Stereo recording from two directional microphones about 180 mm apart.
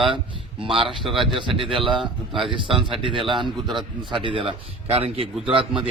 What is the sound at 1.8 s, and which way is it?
Speech, centre (ahead or behind).